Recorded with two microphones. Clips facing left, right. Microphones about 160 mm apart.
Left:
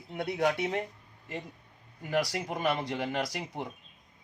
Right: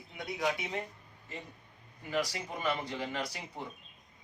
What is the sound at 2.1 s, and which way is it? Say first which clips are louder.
Speech: left 4 dB; 65° left (ahead or behind).